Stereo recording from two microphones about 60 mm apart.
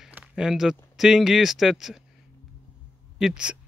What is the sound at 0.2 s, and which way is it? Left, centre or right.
Speech, centre.